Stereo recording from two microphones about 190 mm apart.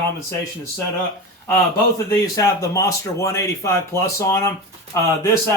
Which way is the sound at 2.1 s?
15° left (ahead or behind).